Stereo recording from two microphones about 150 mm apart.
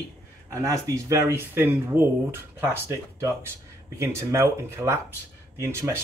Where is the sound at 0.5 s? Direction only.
20° right (ahead or behind).